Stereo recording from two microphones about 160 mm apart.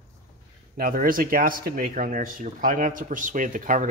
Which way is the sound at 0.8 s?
65° right (ahead or behind).